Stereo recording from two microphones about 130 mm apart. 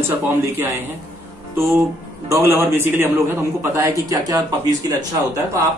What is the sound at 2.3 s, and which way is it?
Speech, 20° right (ahead or behind).